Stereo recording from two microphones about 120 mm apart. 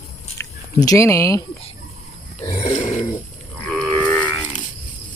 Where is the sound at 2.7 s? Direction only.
75° left (ahead or behind).